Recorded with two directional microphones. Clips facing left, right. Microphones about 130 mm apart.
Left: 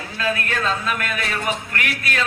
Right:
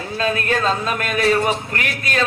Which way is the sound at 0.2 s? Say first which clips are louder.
Right 3 dB; 30° right (ahead or behind).